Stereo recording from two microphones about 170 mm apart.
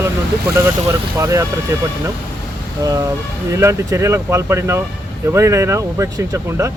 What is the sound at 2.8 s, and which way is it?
A man's voice, 20° right (ahead or behind).